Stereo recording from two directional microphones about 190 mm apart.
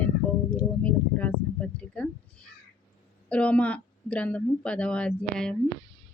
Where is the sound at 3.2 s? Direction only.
5° left (ahead or behind).